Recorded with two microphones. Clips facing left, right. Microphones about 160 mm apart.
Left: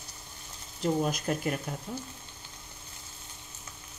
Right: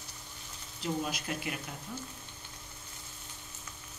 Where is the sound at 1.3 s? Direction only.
45° left (ahead or behind).